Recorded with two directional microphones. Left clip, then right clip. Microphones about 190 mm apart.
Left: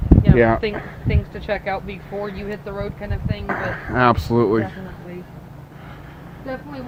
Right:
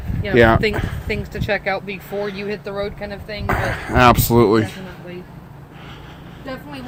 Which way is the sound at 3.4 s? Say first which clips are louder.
Right 3 dB; 35° right (ahead or behind).